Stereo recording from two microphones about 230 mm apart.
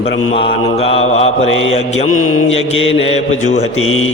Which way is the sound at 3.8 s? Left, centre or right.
Left.